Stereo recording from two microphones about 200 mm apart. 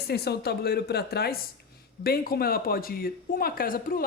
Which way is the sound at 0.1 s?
55° left (ahead or behind).